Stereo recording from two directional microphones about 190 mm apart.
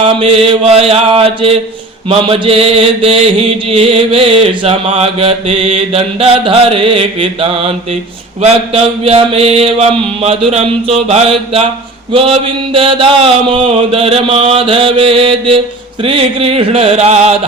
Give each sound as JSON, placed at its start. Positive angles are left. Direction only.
{"t": 0.0, "sound": "mantra", "side_deg": -25}
{"t": 8.4, "sound": "speech", "side_deg": -35}
{"t": 10.2, "sound": "mantra", "side_deg": -30}
{"t": 16.0, "sound": "speech", "side_deg": -30}